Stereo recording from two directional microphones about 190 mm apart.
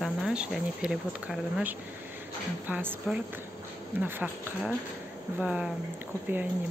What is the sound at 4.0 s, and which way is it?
Speech, 10° right (ahead or behind).